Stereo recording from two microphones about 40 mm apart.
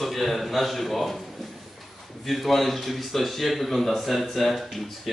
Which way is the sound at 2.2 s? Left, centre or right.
Centre.